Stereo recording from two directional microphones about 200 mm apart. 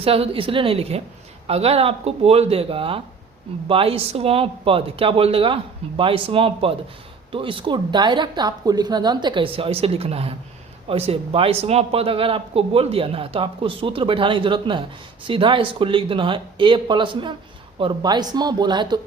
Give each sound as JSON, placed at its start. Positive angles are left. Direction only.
{"t": 0.0, "sound": "speech", "side_deg": -30}